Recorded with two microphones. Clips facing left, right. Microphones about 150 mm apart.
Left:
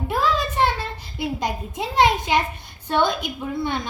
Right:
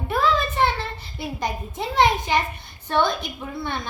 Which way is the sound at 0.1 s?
15° left (ahead or behind).